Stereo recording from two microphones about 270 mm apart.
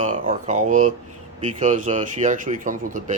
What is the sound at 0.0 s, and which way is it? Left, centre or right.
Speech, right.